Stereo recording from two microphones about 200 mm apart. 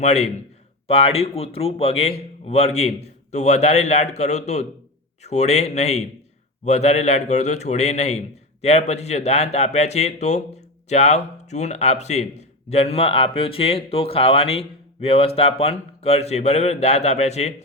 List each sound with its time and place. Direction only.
0.0 s speech: 35° left (ahead or behind)